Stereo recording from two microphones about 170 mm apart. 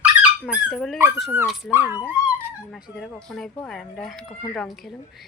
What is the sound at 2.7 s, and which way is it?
Speech, 5° left (ahead or behind).